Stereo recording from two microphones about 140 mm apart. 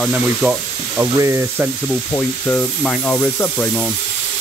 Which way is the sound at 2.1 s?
15° left (ahead or behind).